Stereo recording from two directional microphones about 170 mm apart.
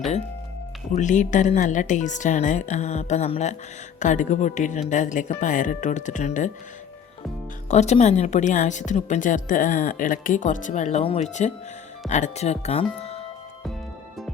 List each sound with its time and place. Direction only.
0.9 s a woman's voice: 45° left (ahead or behind)
7.7 s a woman's voice: 40° left (ahead or behind)